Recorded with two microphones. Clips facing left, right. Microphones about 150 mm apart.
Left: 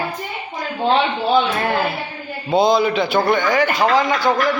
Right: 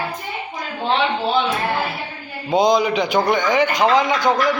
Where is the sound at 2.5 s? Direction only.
15° right (ahead or behind).